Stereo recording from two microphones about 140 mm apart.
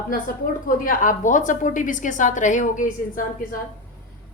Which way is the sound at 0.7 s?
70° left (ahead or behind).